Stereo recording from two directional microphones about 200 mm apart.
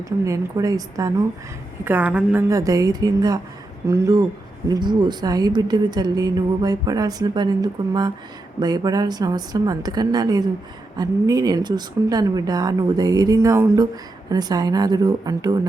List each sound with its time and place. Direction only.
0.0 s a woman's voice: 15° right (ahead or behind)